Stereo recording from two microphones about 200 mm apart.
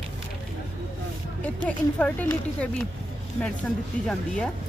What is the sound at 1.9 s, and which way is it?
A woman's voice, 10° left (ahead or behind).